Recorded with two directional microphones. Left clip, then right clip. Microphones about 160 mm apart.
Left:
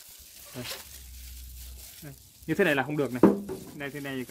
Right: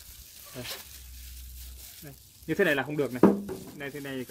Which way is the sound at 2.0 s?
40° left (ahead or behind).